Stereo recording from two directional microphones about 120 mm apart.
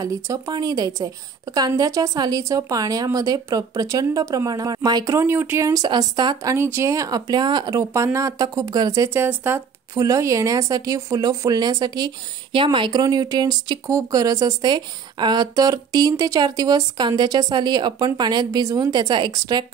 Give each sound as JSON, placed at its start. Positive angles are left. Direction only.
{"t": 0.0, "sound": "a woman's voice", "side_deg": -30}
{"t": 5.7, "sound": "speech", "side_deg": -35}
{"t": 6.5, "sound": "speech", "side_deg": -20}
{"t": 7.9, "sound": "a woman's voice", "side_deg": -25}
{"t": 9.9, "sound": "a woman's voice", "side_deg": -25}